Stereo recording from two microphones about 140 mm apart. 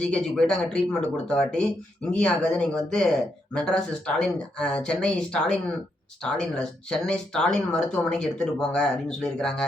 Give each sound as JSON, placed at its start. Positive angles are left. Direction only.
{"t": 0.0, "sound": "speech", "side_deg": 5}